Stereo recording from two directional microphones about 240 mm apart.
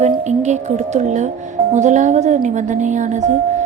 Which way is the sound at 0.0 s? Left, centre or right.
Right.